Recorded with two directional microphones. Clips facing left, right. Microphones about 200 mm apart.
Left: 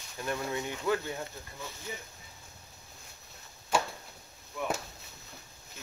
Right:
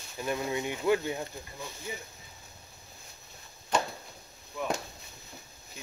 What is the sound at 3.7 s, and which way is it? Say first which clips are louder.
Chopping: right 1 dB; 10° left (ahead or behind).